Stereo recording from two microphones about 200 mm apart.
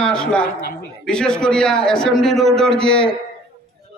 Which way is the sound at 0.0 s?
5° left (ahead or behind).